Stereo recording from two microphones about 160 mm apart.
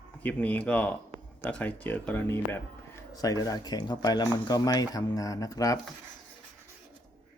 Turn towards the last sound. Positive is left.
turn(degrees=20)  # may be behind; listen again after turning